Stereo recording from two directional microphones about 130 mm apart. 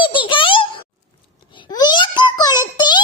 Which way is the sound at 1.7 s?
35° left (ahead or behind).